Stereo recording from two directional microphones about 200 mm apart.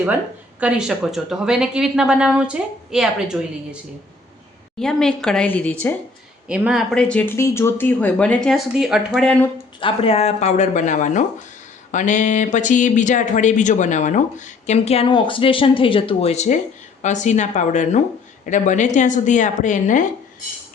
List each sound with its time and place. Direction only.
0.6 s speech: 5° right (ahead or behind)
4.8 s speech: 5° left (ahead or behind)
9.8 s speech: 30° left (ahead or behind)